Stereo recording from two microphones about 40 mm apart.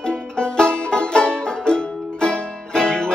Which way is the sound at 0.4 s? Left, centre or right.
Left.